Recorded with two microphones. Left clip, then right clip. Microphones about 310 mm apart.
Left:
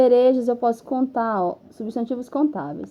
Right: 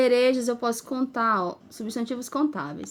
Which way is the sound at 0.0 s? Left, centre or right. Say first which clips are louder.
Left 5 dB; right.